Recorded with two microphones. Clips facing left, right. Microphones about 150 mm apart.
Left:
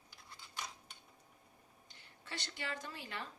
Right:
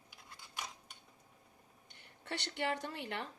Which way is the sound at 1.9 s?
60° right (ahead or behind).